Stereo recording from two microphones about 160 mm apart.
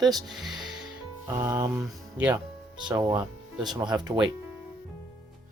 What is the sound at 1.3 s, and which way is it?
Speech, 20° right (ahead or behind).